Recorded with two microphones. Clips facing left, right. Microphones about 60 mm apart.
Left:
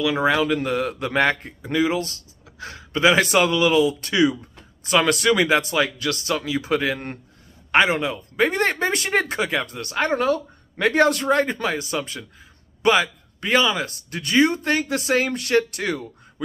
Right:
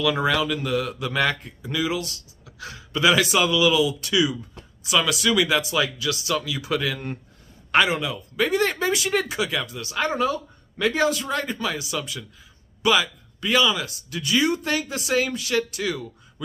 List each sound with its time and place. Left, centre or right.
0.0 s a man's voice: left
6.3 s a man's voice: left